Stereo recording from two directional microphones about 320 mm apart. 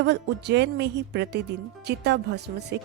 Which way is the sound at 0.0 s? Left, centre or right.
Right.